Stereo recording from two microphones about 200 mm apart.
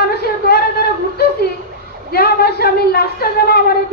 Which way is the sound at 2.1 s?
50° left (ahead or behind).